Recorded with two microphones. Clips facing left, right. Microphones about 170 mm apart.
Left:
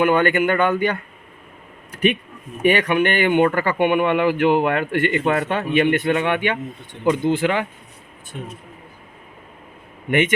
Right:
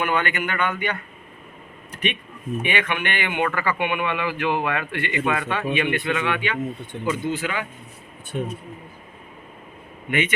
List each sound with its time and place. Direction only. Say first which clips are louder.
0.0 s speech: left 8 dB; 35° left (ahead or behind)
2.6 s speech: left 9 dB; 40° left (ahead or behind); by 7.7 s 55° left (ahead or behind)
10.1 s speech: left 5 dB; 50° left (ahead or behind)